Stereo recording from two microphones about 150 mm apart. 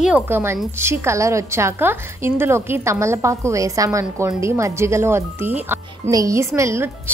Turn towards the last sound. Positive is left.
turn(degrees=-20)  # may be behind; listen again after turning